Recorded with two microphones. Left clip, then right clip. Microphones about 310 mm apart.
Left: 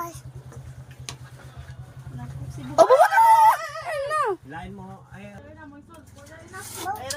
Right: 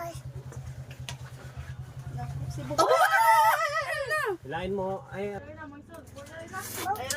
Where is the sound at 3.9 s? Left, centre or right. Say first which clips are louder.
Left 5 dB; centre.